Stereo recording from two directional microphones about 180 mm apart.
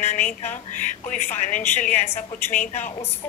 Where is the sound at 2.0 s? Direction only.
10° left (ahead or behind).